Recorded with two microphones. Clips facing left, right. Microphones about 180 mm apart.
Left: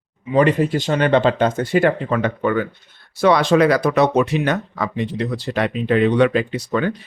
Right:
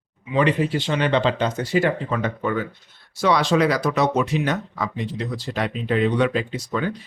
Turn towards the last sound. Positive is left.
turn(degrees=65)  # may be behind; listen again after turning